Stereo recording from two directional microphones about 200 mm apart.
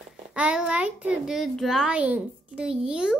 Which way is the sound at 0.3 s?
5° right (ahead or behind).